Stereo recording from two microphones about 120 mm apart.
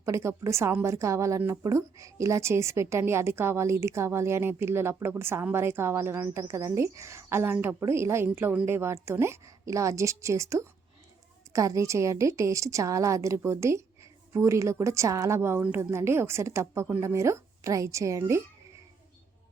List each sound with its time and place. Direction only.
0.0 s a woman's voice: 25° right (ahead or behind)